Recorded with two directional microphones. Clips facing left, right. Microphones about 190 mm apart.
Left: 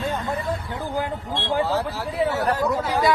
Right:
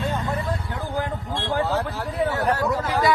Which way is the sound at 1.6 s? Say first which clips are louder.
Left 1 dB; 5° left (ahead or behind).